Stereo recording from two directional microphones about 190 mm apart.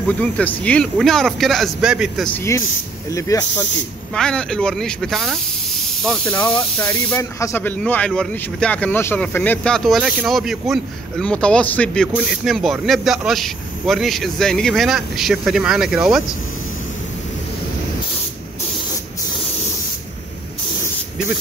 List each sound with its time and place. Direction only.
0.2 s speech: 5° left (ahead or behind)
2.3 s speech: 15° left (ahead or behind)
4.1 s speech: 5° left (ahead or behind)